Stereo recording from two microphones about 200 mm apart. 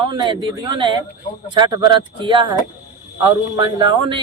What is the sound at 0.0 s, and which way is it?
A man's voice, 25° right (ahead or behind).